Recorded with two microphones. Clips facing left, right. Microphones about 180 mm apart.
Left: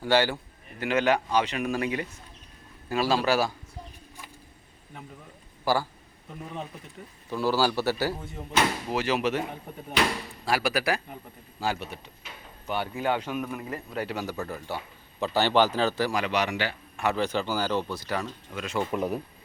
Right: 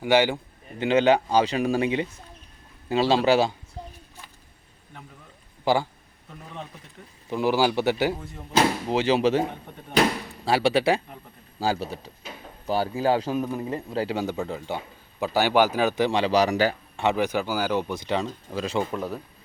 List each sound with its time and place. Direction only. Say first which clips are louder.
0.0 s speech: right 3 dB; 15° right (ahead or behind)
0.8 s speech: right 5 dB; 30° right (ahead or behind)
5.6 s speech: right 3 dB; 20° right (ahead or behind)
7.3 s speech: right 3 dB; 20° right (ahead or behind); by 16.7 s 40° right (ahead or behind)
17.0 s speech: right 3 dB; 15° right (ahead or behind)
18.9 s a man's voice: left 2 dB; 15° left (ahead or behind)